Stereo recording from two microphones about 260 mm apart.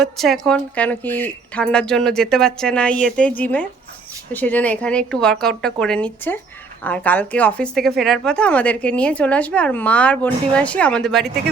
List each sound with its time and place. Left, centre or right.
0.0 s a woman's voice: centre